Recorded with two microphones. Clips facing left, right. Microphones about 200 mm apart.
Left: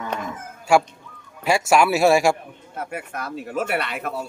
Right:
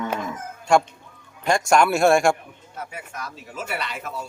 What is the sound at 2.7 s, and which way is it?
Speech, 60° left (ahead or behind).